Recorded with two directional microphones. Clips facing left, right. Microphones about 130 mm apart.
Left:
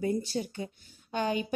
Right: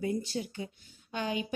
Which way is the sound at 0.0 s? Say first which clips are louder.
Left 3 dB; 40° left (ahead or behind).